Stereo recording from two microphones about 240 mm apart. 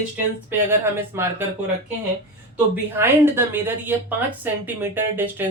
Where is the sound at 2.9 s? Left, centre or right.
Centre.